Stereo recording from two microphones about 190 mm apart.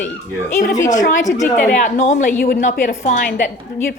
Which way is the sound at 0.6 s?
40° left (ahead or behind).